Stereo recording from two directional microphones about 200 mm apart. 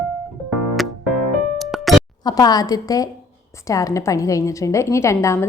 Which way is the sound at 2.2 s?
20° left (ahead or behind).